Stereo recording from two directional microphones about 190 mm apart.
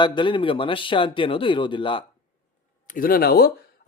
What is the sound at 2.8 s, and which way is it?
Speech, 45° left (ahead or behind).